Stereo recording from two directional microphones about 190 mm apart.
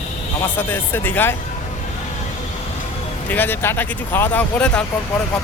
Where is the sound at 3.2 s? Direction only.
10° left (ahead or behind).